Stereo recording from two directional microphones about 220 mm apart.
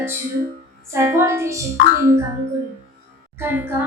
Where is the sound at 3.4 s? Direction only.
10° right (ahead or behind).